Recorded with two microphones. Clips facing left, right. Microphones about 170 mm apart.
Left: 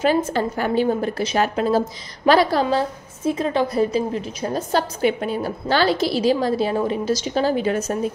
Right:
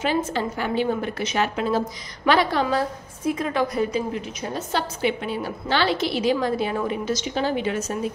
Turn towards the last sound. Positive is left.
turn(degrees=40)  # may be behind; listen again after turning